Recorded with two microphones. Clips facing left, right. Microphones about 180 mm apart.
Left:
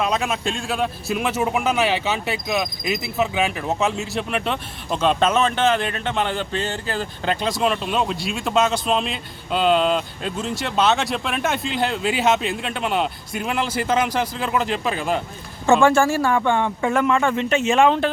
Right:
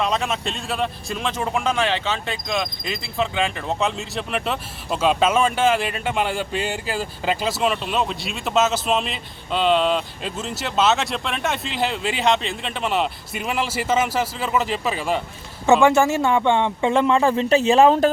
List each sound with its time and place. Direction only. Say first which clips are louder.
0.0 s speech: left 1 dB; centre (ahead or behind)
15.8 s speech: even; 20° right (ahead or behind); by 18.1 s 35° right (ahead or behind)